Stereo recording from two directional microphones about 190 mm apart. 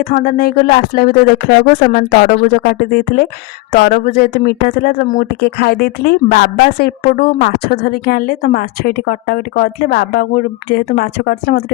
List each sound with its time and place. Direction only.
0.0 s speech: 50° left (ahead or behind)
5.4 s speech: 60° left (ahead or behind)